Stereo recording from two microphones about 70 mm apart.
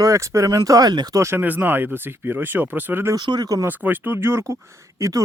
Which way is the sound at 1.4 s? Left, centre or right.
Right.